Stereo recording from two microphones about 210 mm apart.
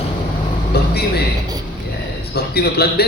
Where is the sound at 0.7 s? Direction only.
50° left (ahead or behind).